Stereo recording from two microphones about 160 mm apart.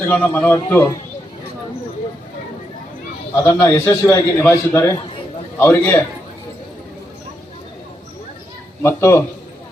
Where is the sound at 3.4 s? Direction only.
15° left (ahead or behind).